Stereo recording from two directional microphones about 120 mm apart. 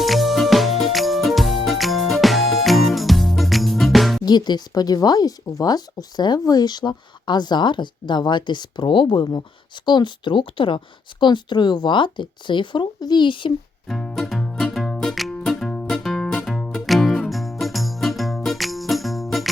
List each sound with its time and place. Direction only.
0.0 s music: centre (ahead or behind)
4.3 s speech: 35° left (ahead or behind)
13.8 s music: 5° left (ahead or behind)